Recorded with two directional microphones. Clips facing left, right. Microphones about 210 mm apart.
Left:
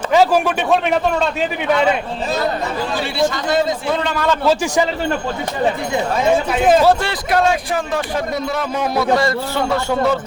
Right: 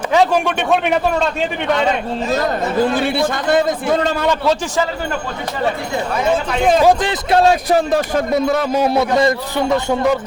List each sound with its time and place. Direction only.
0.1 s a man's voice: 5° left (ahead or behind)
2.8 s a man's voice: 55° right (ahead or behind)
4.4 s speech: 10° left (ahead or behind)
6.5 s a man's voice: 5° left (ahead or behind)
6.8 s speech: 20° right (ahead or behind)
7.5 s a man's voice: 40° right (ahead or behind); by 10.2 s 15° right (ahead or behind)